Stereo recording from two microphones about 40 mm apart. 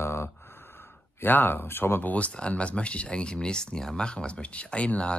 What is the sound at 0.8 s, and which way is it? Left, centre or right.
Speech, left.